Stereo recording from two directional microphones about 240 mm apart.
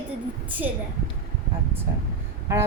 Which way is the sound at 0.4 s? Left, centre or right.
Centre.